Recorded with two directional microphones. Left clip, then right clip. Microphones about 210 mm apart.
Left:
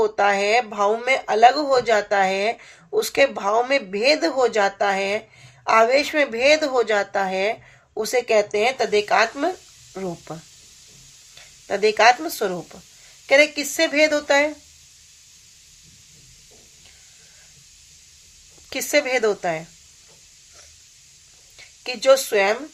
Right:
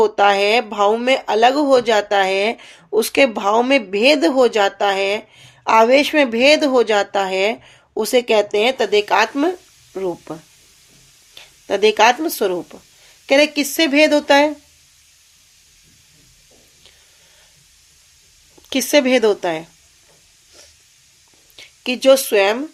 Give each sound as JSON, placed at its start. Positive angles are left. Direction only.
{"t": 0.0, "sound": "speech", "side_deg": -45}
{"t": 11.3, "sound": "speech", "side_deg": -45}
{"t": 18.7, "sound": "speech", "side_deg": -40}
{"t": 21.5, "sound": "speech", "side_deg": -45}